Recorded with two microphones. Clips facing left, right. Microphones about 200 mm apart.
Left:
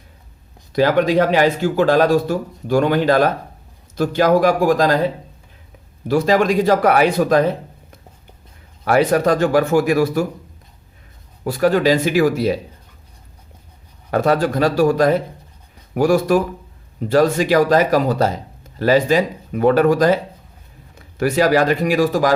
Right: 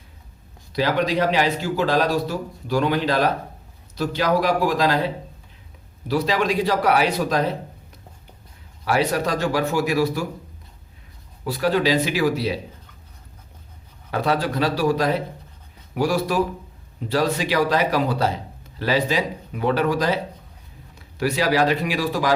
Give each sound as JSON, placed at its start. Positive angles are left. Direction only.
{"t": 0.7, "sound": "a man's voice", "side_deg": 50}
{"t": 6.1, "sound": "a man's voice", "side_deg": 50}
{"t": 8.8, "sound": "a man's voice", "side_deg": 50}
{"t": 11.4, "sound": "a man's voice", "side_deg": 50}
{"t": 14.1, "sound": "a man's voice", "side_deg": 45}
{"t": 21.2, "sound": "a man's voice", "side_deg": 50}